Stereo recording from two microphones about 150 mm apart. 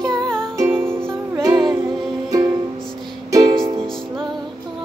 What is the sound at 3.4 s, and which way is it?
Music, 35° right (ahead or behind).